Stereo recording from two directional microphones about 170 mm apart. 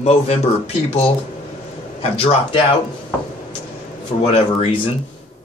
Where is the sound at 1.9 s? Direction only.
35° left (ahead or behind).